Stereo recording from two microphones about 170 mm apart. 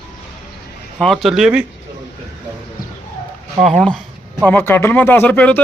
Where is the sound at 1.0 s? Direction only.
Centre (ahead or behind).